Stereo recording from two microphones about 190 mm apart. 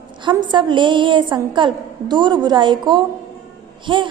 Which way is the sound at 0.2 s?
25° right (ahead or behind).